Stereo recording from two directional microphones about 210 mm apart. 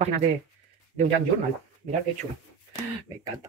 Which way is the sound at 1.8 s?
45° right (ahead or behind).